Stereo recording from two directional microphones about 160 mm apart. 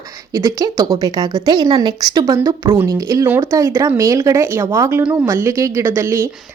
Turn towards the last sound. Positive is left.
turn(degrees=-15)  # may be behind; listen again after turning